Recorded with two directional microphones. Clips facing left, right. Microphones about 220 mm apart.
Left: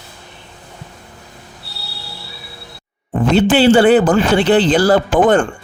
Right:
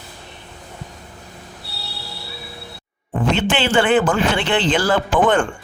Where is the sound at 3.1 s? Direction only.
35° left (ahead or behind).